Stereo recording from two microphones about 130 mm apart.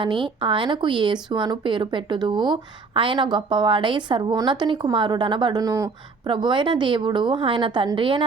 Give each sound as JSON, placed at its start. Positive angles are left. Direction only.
{"t": 0.0, "sound": "speech", "side_deg": -40}